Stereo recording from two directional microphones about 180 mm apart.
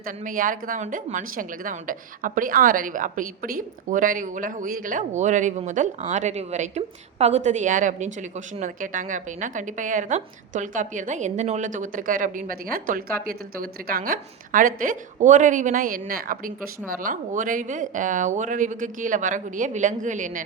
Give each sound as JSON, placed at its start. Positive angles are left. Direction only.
{"t": 0.0, "sound": "a woman's voice", "side_deg": -50}